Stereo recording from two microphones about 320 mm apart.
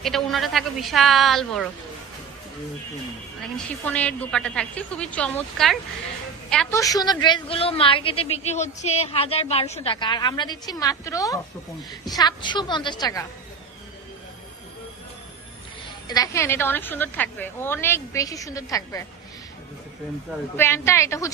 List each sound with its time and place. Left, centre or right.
0.0 s a woman's voice: centre
3.8 s a woman's voice: centre
16.0 s a woman's voice: centre
20.6 s a woman's voice: centre